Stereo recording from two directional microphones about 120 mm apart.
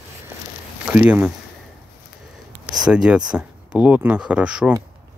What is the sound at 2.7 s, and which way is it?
Speech, 5° right (ahead or behind).